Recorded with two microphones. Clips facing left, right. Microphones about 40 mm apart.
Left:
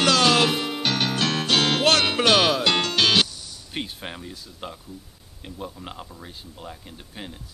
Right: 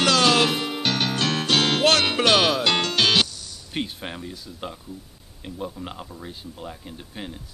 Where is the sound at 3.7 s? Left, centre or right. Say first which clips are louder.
Right 3 dB; centre.